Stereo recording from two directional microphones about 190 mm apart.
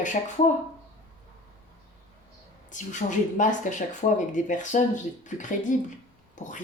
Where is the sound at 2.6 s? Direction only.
40° left (ahead or behind).